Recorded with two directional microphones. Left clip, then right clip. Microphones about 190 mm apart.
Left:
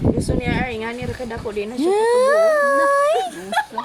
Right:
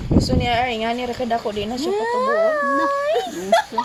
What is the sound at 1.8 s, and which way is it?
Speech, 55° left (ahead or behind).